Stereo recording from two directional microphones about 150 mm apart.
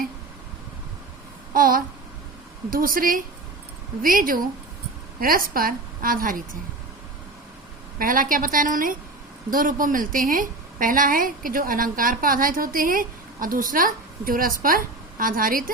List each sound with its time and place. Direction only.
1.5 s a woman's voice: 70° right (ahead or behind)
7.9 s a woman's voice: 65° right (ahead or behind)